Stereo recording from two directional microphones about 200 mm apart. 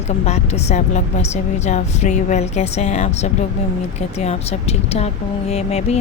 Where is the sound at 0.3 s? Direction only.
35° left (ahead or behind).